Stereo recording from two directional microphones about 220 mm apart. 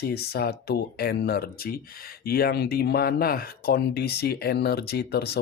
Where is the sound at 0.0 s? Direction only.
45° left (ahead or behind).